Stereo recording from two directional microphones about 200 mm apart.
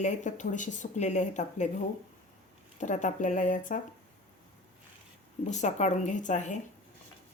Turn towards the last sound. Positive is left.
turn(degrees=35)  # may be behind; listen again after turning